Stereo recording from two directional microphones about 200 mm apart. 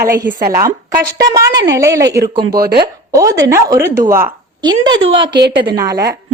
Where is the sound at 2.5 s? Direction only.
50° right (ahead or behind).